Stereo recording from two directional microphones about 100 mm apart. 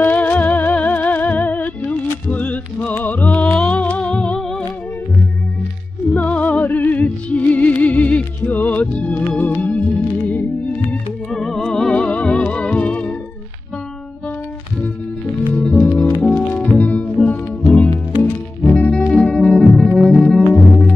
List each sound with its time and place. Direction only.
0.0 s music: 15° left (ahead or behind)
6.1 s music: 15° left (ahead or behind)
11.3 s music: 5° left (ahead or behind)
15.5 s music: 10° left (ahead or behind)